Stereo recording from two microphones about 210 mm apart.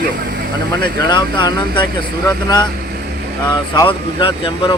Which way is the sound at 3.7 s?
25° left (ahead or behind).